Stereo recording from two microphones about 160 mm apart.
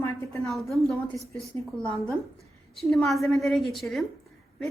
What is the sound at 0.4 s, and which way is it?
Speech, centre (ahead or behind).